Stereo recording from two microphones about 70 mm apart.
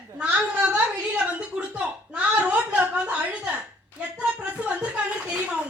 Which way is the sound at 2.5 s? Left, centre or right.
Right.